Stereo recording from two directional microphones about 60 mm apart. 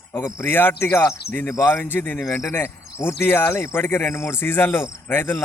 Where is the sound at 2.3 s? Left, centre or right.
Left.